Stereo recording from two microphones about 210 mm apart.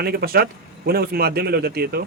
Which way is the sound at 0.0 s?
50° right (ahead or behind).